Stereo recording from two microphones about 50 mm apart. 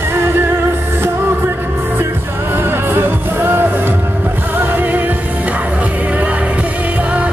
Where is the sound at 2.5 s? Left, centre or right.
Right.